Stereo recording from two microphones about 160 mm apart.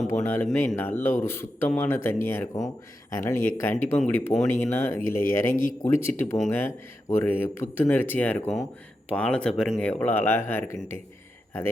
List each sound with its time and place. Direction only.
0.2 s speech: 15° left (ahead or behind)